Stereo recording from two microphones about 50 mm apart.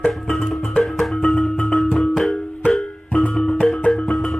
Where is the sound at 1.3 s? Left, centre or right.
Centre.